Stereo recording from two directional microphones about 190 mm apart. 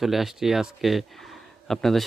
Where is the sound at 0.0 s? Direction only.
Centre (ahead or behind).